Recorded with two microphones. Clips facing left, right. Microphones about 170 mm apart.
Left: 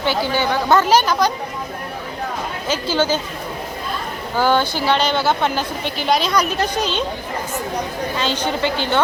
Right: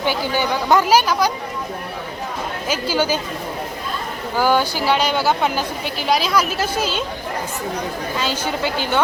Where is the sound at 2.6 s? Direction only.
10° right (ahead or behind).